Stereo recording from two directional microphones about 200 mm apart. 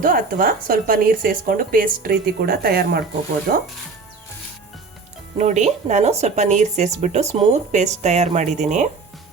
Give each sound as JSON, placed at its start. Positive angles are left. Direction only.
{"t": 0.0, "sound": "a woman's voice", "side_deg": -45}
{"t": 5.4, "sound": "speech", "side_deg": -35}